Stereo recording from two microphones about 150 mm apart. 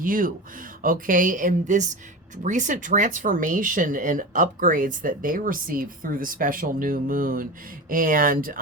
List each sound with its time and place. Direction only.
0.0 s speech: 65° right (ahead or behind)